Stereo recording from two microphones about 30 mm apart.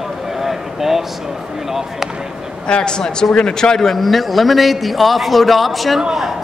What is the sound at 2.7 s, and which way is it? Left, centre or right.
A man's voice, left.